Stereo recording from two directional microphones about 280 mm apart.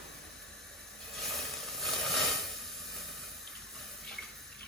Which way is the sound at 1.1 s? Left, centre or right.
Centre.